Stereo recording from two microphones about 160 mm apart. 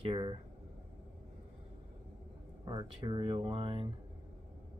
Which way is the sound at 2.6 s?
30° right (ahead or behind).